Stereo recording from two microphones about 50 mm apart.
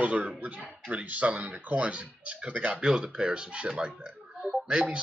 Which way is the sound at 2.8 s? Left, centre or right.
Centre.